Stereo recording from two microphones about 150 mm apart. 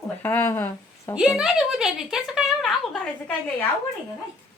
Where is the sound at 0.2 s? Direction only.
15° left (ahead or behind).